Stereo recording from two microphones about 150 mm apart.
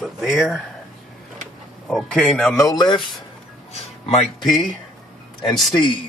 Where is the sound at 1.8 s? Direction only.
5° left (ahead or behind).